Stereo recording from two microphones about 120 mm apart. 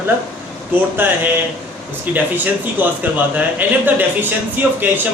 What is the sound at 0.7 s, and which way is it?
A man's voice, 15° right (ahead or behind).